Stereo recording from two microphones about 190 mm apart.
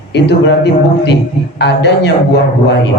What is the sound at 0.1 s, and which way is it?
A man's voice, 65° left (ahead or behind).